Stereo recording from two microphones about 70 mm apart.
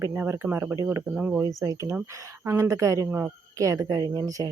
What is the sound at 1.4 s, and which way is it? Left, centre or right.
Speech, right.